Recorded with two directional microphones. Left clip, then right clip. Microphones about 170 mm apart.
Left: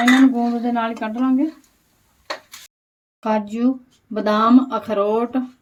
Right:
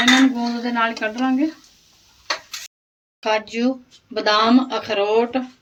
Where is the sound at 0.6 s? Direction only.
60° left (ahead or behind).